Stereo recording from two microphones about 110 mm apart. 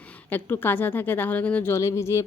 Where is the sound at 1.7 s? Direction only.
25° left (ahead or behind).